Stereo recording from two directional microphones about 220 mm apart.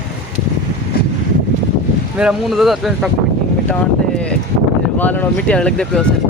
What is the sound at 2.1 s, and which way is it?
Speech, 5° right (ahead or behind).